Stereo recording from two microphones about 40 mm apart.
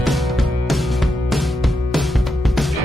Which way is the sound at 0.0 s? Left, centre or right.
Centre.